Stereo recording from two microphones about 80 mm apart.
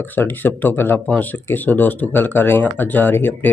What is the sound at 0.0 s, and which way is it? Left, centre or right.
Speech, left.